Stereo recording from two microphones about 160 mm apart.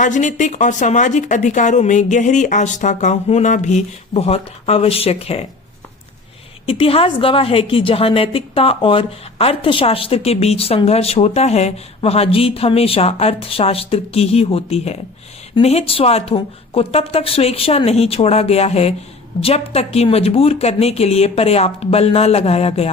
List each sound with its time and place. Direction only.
0.0 s a woman's voice: 50° left (ahead or behind)
6.7 s a woman's voice: 35° left (ahead or behind)